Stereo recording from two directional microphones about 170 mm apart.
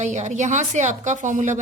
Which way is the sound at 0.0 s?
45° right (ahead or behind).